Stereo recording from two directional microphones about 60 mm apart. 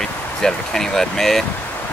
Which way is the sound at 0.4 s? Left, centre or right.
Centre.